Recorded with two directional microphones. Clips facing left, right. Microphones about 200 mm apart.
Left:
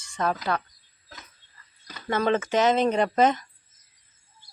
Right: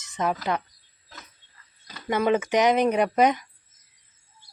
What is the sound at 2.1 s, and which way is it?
Speech, 10° right (ahead or behind).